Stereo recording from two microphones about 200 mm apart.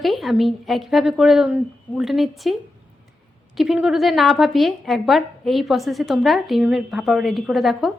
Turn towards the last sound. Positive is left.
turn(degrees=0)  # may be behind; listen again after turning